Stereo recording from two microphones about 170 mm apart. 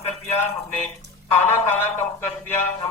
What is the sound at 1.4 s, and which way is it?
A woman's voice, 10° left (ahead or behind).